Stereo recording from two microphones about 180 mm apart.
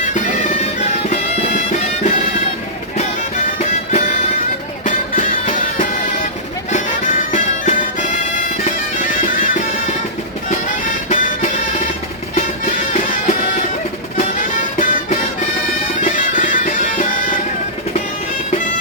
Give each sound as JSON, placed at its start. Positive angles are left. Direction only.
{"t": 0.6, "sound": "music", "side_deg": 40}
{"t": 3.6, "sound": "music", "side_deg": 40}
{"t": 16.0, "sound": "bagpipes", "side_deg": 45}